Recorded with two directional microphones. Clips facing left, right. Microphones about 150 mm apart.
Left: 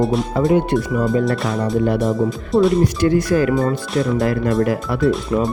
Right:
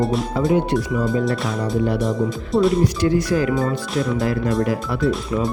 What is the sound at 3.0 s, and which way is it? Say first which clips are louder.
Speech: left 3 dB; 55° left (ahead or behind).